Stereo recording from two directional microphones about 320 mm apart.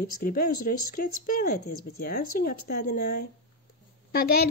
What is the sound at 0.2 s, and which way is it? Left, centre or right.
Speech, left.